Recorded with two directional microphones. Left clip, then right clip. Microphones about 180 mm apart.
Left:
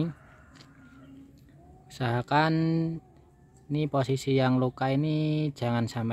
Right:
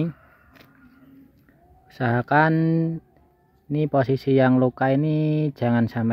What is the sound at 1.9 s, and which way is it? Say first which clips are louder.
Speech: right 6 dB; 35° right (ahead or behind).